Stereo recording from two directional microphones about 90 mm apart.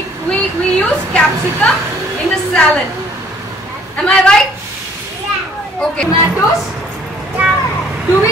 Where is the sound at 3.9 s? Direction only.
10° left (ahead or behind).